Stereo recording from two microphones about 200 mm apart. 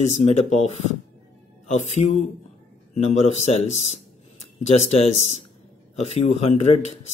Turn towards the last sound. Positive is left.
turn(degrees=35)  # may be behind; listen again after turning